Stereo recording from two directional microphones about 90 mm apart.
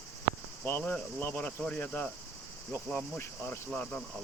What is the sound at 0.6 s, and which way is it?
Cricket, 25° left (ahead or behind).